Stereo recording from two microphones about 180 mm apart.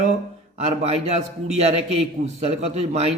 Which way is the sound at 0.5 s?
35° right (ahead or behind).